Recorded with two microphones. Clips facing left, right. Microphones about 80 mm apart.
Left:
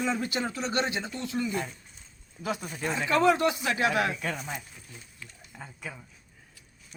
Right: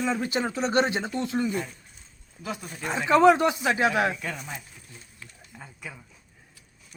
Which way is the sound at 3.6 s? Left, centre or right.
Right.